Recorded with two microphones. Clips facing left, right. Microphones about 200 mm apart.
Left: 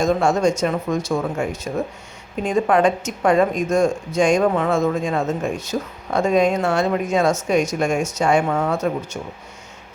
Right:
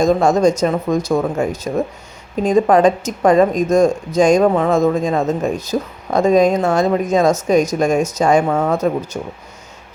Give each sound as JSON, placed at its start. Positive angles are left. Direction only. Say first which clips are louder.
{"t": 0.0, "sound": "speech", "louder": "right 4 dB", "side_deg": -40}